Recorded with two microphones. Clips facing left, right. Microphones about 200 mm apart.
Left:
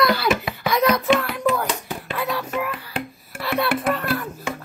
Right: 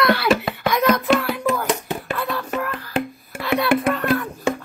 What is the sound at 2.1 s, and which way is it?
Whispering, 10° left (ahead or behind).